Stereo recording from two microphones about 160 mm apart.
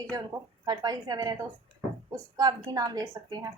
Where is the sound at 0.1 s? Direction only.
25° right (ahead or behind).